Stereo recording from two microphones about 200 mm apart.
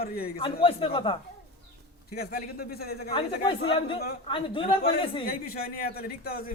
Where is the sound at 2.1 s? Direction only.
50° left (ahead or behind).